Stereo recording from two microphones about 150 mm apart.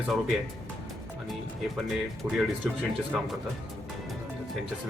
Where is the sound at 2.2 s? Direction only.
10° right (ahead or behind).